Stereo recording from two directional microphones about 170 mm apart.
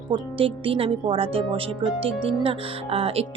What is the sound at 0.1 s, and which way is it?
Speech, 30° right (ahead or behind).